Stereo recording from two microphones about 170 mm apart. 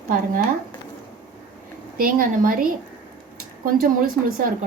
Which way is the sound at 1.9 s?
55° right (ahead or behind).